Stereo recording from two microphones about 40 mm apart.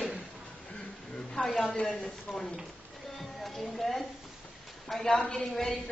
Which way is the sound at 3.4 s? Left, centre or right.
Centre.